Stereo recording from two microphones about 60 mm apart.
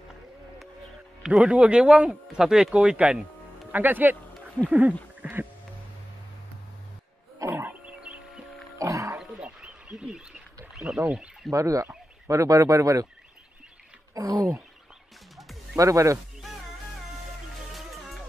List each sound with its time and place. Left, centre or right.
1.4 s speech: centre
3.7 s speech: right
5.2 s music: right
7.4 s a sound: right
8.7 s music: right
9.4 s a sound: centre
11.5 s speech: right
14.1 s speech: right
15.8 s speech: right
17.7 s music: centre